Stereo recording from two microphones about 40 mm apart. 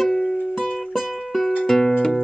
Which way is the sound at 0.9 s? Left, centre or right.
Centre.